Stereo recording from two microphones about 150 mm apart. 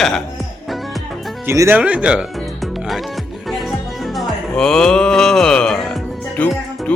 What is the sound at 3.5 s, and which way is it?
Music, centre (ahead or behind).